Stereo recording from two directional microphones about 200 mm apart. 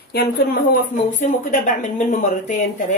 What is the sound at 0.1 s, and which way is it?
Speech, 50° left (ahead or behind).